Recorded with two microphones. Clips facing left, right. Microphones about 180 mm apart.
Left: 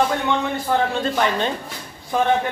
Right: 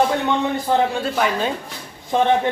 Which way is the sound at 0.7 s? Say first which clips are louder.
Right 2 dB; 20° right (ahead or behind).